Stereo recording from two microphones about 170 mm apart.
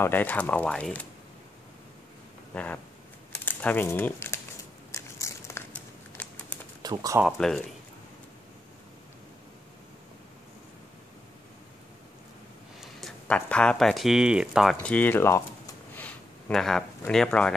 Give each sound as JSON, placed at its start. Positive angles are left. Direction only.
{"t": 0.0, "sound": "speech", "side_deg": 10}
{"t": 2.5, "sound": "speech", "side_deg": 10}
{"t": 4.9, "sound": "crumpling", "side_deg": 15}
{"t": 6.8, "sound": "speech", "side_deg": -20}
{"t": 7.2, "sound": "speech", "side_deg": 0}
{"t": 12.8, "sound": "speech", "side_deg": 5}